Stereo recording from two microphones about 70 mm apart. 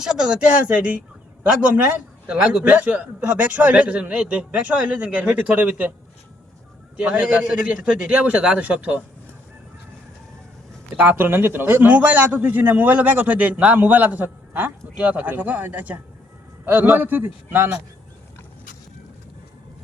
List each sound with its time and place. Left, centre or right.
0.0 s a man's voice: centre
2.2 s a man's voice: centre
6.9 s a man's voice: centre
10.9 s a man's voice: right